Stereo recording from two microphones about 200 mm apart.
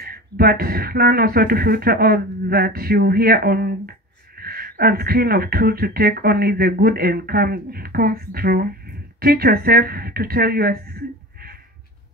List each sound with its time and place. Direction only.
0.0 s speech: 50° right (ahead or behind)